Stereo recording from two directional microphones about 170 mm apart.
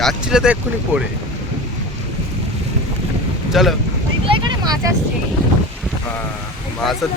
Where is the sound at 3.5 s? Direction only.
Centre (ahead or behind).